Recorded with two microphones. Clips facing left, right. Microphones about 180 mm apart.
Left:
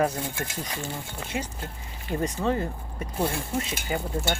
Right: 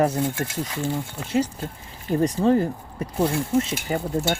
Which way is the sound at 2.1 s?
35° right (ahead or behind).